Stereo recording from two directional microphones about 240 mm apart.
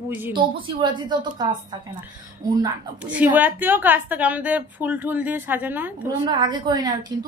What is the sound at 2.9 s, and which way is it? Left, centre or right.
A woman's voice, centre.